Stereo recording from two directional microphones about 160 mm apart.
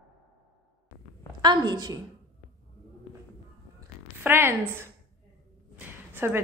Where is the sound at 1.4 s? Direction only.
25° right (ahead or behind).